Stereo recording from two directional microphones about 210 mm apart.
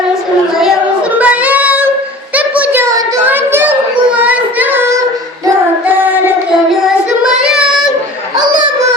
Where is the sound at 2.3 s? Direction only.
5° right (ahead or behind).